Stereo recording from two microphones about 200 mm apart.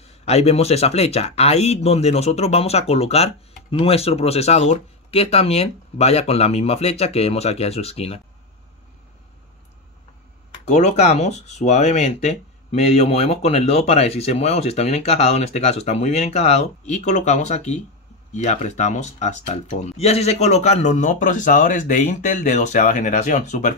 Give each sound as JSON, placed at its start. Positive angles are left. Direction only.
{"t": 0.0, "sound": "speech", "side_deg": 30}
{"t": 10.7, "sound": "speech", "side_deg": 35}